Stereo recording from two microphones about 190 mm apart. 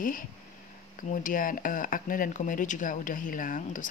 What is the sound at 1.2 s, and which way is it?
Speech, 45° left (ahead or behind).